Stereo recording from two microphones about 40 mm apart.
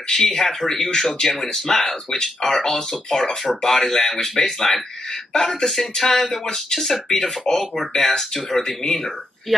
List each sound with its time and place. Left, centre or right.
0.3 s speech: centre
7.9 s speech: centre
8.2 s speech: centre